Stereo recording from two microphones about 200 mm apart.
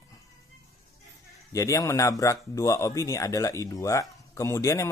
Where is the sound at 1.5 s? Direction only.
15° left (ahead or behind).